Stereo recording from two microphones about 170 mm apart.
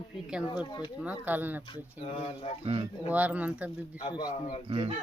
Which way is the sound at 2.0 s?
35° left (ahead or behind).